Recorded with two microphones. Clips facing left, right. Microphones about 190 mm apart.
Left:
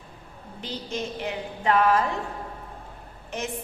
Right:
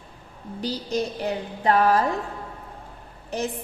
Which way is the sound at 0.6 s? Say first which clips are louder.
Right 6 dB; 40° right (ahead or behind).